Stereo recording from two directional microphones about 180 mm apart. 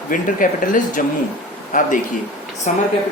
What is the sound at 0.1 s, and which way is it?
Speech, 50° left (ahead or behind).